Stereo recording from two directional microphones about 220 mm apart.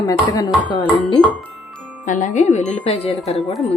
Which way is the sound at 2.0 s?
35° left (ahead or behind).